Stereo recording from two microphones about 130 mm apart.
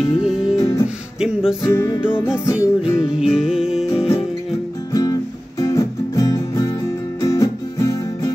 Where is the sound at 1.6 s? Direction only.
20° left (ahead or behind).